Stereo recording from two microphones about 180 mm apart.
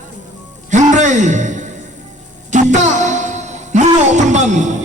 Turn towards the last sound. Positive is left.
turn(degrees=-40)  # may be behind; listen again after turning